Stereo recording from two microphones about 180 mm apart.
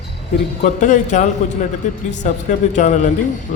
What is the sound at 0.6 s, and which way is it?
A man's voice, 45° left (ahead or behind).